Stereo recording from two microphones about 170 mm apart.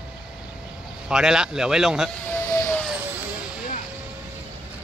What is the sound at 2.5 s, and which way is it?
Siren, 10° left (ahead or behind).